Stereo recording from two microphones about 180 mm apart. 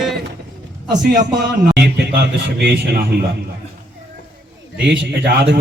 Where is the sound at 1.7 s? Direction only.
70° right (ahead or behind).